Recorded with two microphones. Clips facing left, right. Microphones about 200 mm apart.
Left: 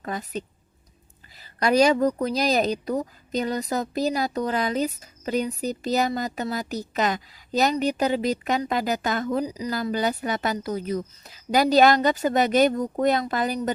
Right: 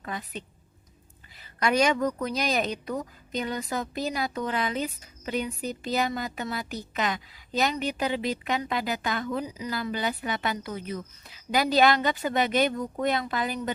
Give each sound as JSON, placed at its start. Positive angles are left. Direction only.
{"t": 0.0, "sound": "a woman's voice", "side_deg": 40}